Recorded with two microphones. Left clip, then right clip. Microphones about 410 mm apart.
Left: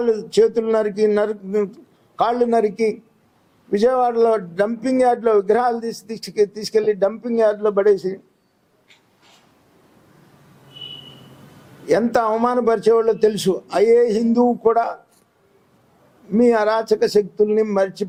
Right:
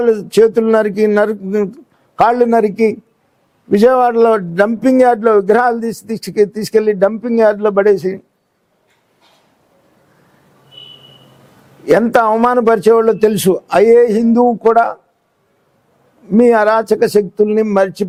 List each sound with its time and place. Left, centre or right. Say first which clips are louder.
0.0 s a man's voice: right 6 dB; right
11.9 s a man's voice: right 7 dB; right
16.3 s a man's voice: right 6 dB; right